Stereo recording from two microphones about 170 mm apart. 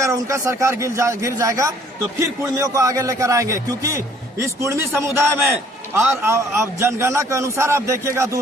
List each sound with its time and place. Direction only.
0.0 s a man's voice: 20° right (ahead or behind)